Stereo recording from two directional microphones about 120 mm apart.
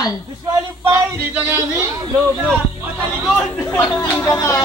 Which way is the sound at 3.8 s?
25° left (ahead or behind).